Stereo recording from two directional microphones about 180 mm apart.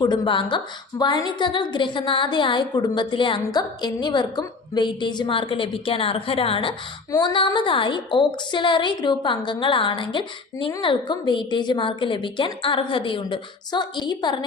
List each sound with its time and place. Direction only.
0.0 s a woman's voice: 30° left (ahead or behind)